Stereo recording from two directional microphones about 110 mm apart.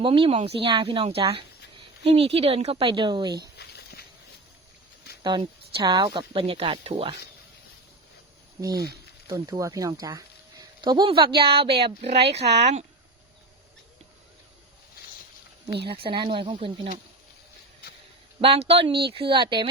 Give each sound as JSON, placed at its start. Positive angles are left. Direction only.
{"t": 0.0, "sound": "speech", "side_deg": -55}
{"t": 5.2, "sound": "speech", "side_deg": -45}
{"t": 9.3, "sound": "speech", "side_deg": -30}
{"t": 10.8, "sound": "speech", "side_deg": -40}
{"t": 12.0, "sound": "speech", "side_deg": -70}
{"t": 15.6, "sound": "speech", "side_deg": -50}
{"t": 18.3, "sound": "speech", "side_deg": -60}
{"t": 18.9, "sound": "speech", "side_deg": -50}